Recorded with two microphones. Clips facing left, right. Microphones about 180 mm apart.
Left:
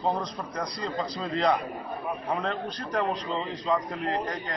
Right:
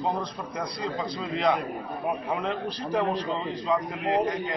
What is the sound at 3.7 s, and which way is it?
Speech, centre (ahead or behind).